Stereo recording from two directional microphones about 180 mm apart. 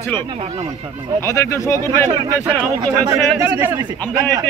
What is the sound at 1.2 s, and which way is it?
Speech, 15° left (ahead or behind).